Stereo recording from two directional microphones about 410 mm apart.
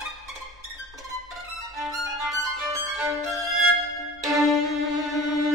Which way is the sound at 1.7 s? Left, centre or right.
Centre.